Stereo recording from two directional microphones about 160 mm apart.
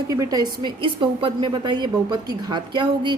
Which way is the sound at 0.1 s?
20° right (ahead or behind).